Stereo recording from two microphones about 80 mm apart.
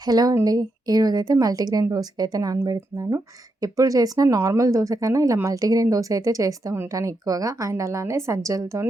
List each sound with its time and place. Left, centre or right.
0.0 s a woman's voice: right